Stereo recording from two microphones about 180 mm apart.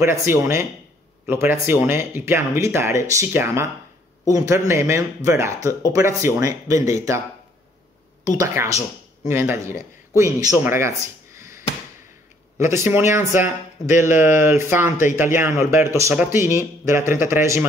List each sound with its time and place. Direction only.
0.0 s speech: 15° right (ahead or behind)
8.4 s speech: 15° right (ahead or behind)
10.6 s a sound: 15° right (ahead or behind)
12.5 s speech: 15° right (ahead or behind)